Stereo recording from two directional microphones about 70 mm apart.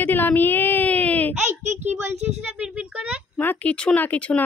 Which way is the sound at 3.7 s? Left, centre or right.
Centre.